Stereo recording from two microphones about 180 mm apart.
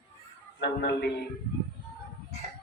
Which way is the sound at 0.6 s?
65° left (ahead or behind).